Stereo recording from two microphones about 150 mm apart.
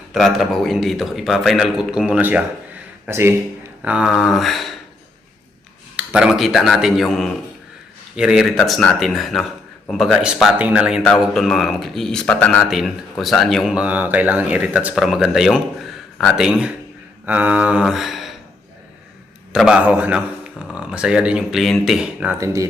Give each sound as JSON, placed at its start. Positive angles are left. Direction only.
{"t": 0.1, "sound": "a man's voice", "side_deg": 0}
{"t": 3.8, "sound": "a man's voice", "side_deg": -5}
{"t": 6.0, "sound": "a man's voice", "side_deg": -5}
{"t": 17.2, "sound": "a sound", "side_deg": -10}
{"t": 19.5, "sound": "a man's voice", "side_deg": -5}